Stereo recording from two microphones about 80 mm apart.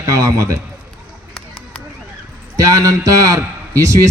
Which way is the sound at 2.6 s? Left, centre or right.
Right.